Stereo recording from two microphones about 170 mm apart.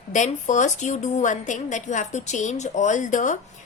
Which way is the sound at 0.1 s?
45° left (ahead or behind).